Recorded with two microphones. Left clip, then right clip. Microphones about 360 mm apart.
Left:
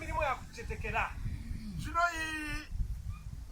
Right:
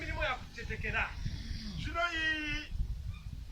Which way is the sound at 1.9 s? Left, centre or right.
Centre.